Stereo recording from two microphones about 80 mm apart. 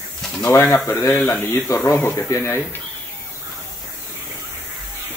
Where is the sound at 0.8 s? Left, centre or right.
Left.